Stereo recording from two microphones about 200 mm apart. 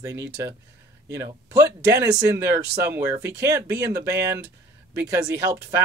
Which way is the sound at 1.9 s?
15° right (ahead or behind).